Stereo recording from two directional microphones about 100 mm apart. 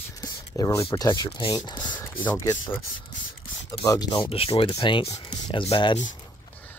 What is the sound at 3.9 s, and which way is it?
Speech, 40° left (ahead or behind).